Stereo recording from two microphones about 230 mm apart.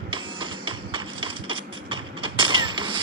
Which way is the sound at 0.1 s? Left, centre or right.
Right.